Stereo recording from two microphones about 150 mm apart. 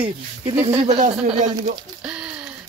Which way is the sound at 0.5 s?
40° right (ahead or behind).